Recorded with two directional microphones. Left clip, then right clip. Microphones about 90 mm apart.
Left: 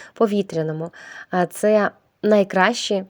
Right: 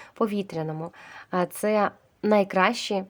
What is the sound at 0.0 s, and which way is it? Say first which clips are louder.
Speech: left 8 dB; 40° left (ahead or behind).